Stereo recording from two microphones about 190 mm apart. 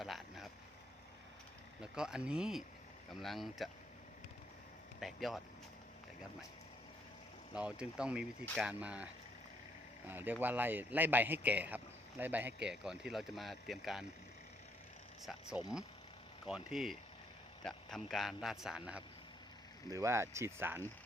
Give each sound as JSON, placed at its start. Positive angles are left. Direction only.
{"t": 0.0, "sound": "vehicle", "side_deg": 0}
{"t": 1.8, "sound": "speech", "side_deg": -5}
{"t": 4.9, "sound": "speech", "side_deg": 0}
{"t": 7.5, "sound": "speech", "side_deg": -5}
{"t": 10.1, "sound": "speech", "side_deg": -10}
{"t": 15.2, "sound": "speech", "side_deg": 0}
{"t": 19.9, "sound": "speech", "side_deg": -15}